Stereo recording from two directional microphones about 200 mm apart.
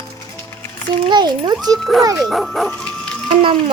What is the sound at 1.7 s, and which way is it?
A child's voice, centre (ahead or behind).